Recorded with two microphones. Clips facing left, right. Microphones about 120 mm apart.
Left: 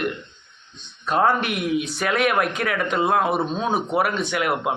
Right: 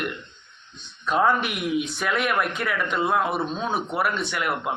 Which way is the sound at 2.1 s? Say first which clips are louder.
Left 4 dB; 80° left.